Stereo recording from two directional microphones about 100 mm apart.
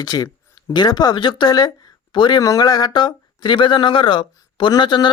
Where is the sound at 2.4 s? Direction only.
40° left (ahead or behind).